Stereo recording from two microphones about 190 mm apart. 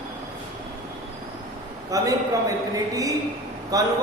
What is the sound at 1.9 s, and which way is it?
A woman's voice, 15° right (ahead or behind).